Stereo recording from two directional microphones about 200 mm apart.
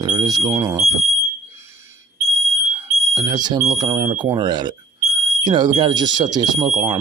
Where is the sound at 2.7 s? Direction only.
15° right (ahead or behind).